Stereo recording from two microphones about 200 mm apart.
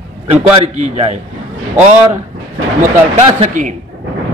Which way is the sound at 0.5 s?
35° right (ahead or behind).